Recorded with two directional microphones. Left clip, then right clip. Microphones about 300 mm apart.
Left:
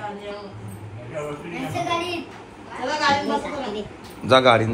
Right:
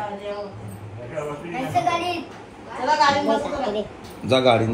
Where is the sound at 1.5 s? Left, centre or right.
Centre.